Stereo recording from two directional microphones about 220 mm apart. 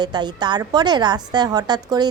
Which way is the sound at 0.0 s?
20° right (ahead or behind).